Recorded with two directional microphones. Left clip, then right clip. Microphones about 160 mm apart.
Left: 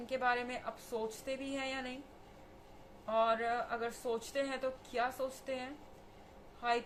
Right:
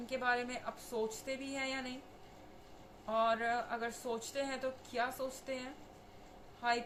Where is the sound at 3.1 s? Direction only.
15° left (ahead or behind).